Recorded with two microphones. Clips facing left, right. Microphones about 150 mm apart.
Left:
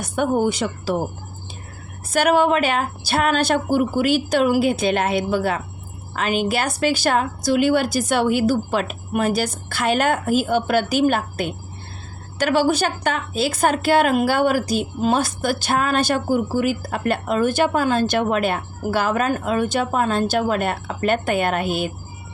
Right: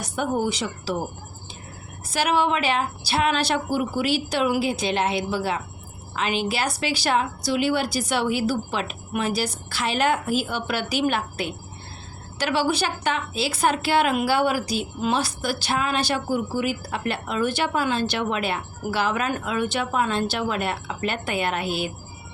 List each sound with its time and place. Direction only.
0.0 s a woman's voice: 50° left (ahead or behind)
2.0 s a woman's voice: 50° left (ahead or behind)